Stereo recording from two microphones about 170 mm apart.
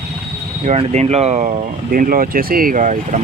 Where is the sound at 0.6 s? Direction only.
40° right (ahead or behind).